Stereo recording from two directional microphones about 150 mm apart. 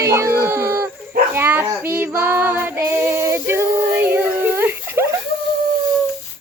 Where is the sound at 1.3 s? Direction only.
15° right (ahead or behind).